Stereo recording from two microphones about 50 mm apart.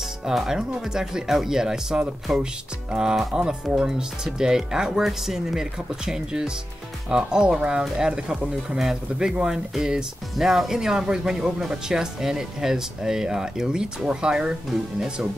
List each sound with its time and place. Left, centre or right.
0.2 s speech: centre